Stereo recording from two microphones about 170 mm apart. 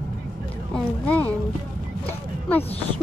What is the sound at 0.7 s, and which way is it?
Speech, 10° left (ahead or behind).